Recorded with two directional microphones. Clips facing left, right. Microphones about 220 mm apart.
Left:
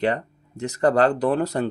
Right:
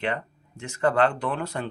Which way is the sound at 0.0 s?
40° left (ahead or behind).